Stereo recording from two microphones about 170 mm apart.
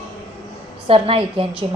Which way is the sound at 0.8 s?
35° right (ahead or behind).